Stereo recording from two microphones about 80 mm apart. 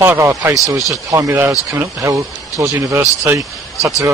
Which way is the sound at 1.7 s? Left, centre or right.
Right.